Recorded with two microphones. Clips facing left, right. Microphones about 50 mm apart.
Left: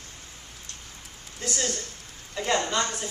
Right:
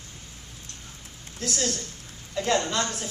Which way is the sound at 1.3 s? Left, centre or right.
Centre.